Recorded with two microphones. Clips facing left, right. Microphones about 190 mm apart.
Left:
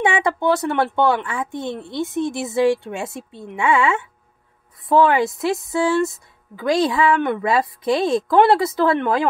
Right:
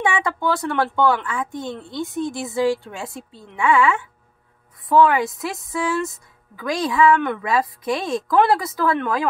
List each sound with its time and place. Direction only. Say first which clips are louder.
0.0 s a woman's voice: left 3 dB; 25° left (ahead or behind)